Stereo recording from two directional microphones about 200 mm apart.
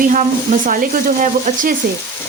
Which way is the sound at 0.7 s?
40° right (ahead or behind).